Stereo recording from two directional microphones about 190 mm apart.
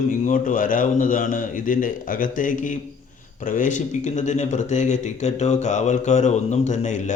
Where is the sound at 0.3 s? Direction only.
45° left (ahead or behind).